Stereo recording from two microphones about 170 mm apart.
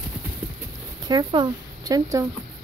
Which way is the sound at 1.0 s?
25° right (ahead or behind).